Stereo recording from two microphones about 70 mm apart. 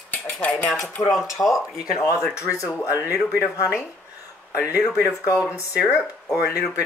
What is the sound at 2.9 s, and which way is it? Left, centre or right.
Speech, right.